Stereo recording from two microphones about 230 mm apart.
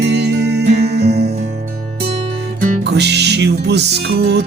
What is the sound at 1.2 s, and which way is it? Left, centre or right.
Music, right.